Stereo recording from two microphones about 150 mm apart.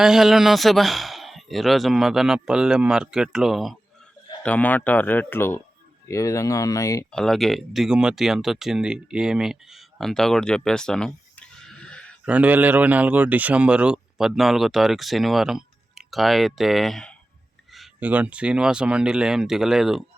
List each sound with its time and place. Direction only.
0.0 s a man's voice: 5° right (ahead or behind)
4.4 s speech: 10° left (ahead or behind)
7.1 s speech: 5° left (ahead or behind)
12.2 s a man's voice: 10° right (ahead or behind)
18.0 s a man's voice: 10° right (ahead or behind)